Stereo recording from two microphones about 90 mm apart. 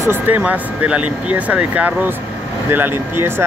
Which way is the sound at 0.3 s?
15° right (ahead or behind).